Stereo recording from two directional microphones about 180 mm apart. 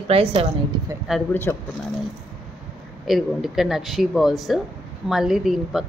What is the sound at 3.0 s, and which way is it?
Speech, centre (ahead or behind).